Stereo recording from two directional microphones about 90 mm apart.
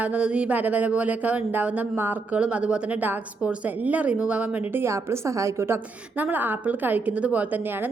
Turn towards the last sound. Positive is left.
turn(degrees=-20)  # may be behind; listen again after turning